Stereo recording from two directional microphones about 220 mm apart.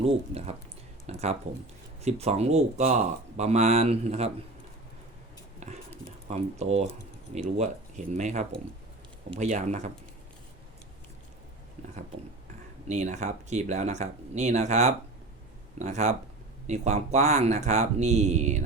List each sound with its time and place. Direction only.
0.0 s speech: 25° right (ahead or behind)
5.5 s a sound: 30° right (ahead or behind)
6.2 s speech: 30° right (ahead or behind)
12.9 s speech: 30° right (ahead or behind)